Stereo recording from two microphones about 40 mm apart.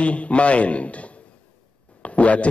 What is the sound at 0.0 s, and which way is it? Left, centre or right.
A man's voice, left.